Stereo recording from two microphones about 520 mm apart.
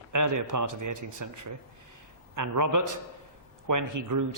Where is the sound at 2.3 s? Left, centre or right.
Right.